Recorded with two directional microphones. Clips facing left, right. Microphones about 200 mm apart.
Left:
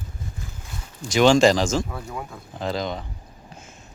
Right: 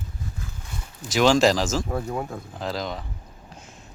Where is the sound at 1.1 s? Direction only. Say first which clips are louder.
Left 2 dB; centre (ahead or behind).